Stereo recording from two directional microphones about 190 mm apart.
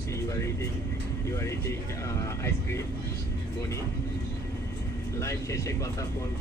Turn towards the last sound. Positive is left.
turn(degrees=15)  # may be behind; listen again after turning